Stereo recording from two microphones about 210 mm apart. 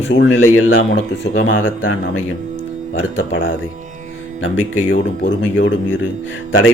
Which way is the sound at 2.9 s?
65° left (ahead or behind).